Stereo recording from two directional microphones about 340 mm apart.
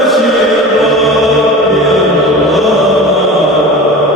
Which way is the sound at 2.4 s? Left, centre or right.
Centre.